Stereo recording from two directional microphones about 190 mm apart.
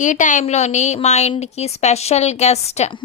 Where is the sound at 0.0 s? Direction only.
40° left (ahead or behind).